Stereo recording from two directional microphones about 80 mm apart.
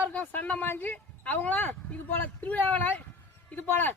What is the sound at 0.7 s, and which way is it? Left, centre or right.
A woman's voice, left.